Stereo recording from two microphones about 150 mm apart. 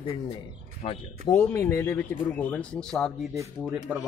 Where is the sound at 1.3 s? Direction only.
20° left (ahead or behind).